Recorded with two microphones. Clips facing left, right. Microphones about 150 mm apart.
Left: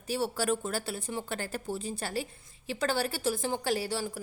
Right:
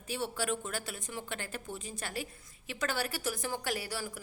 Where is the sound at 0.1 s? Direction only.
35° left (ahead or behind).